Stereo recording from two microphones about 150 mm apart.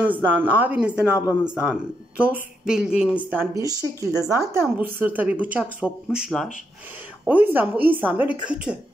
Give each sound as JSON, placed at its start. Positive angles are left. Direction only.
{"t": 0.4, "sound": "a woman's voice", "side_deg": -10}
{"t": 3.6, "sound": "a woman's voice", "side_deg": -25}
{"t": 7.2, "sound": "a woman's voice", "side_deg": -10}